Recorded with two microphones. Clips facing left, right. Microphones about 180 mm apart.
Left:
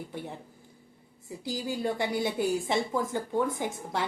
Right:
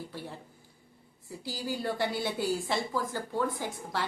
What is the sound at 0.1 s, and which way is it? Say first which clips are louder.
Speech: left 3 dB; 20° left (ahead or behind).